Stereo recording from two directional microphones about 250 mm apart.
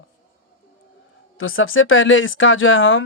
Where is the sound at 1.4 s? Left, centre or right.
Left.